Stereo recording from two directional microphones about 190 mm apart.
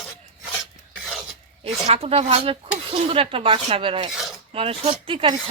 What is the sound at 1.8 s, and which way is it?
A woman's voice, 30° right (ahead or behind).